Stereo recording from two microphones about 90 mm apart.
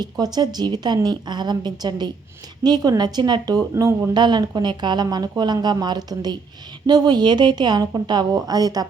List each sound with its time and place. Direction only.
0.0 s a woman's voice: 50° right (ahead or behind)
4.1 s a woman's voice: 55° right (ahead or behind)